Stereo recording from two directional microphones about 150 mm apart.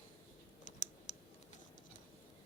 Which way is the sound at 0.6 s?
55° left (ahead or behind).